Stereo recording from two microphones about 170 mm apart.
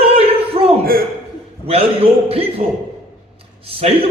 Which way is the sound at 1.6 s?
35° right (ahead or behind).